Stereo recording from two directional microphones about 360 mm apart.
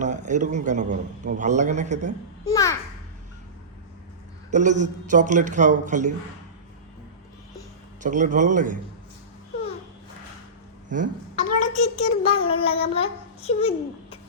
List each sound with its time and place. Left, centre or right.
0.0 s a man's voice: centre
2.5 s a child's voice: centre
4.5 s a man's voice: centre
8.0 s a man's voice: right
10.8 s speech: right
11.3 s a child's voice: centre